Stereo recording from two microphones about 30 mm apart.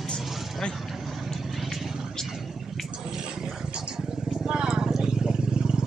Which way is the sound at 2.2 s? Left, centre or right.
Centre.